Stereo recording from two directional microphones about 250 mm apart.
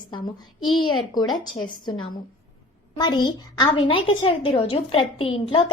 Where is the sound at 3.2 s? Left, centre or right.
Centre.